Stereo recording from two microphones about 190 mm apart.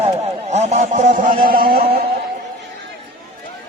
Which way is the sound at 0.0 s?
35° right (ahead or behind).